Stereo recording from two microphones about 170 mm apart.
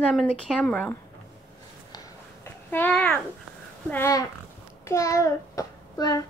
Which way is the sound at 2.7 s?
10° left (ahead or behind).